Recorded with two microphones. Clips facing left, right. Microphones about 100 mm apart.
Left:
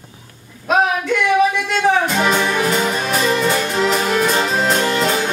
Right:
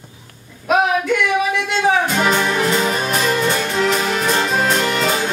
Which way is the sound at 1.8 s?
Centre (ahead or behind).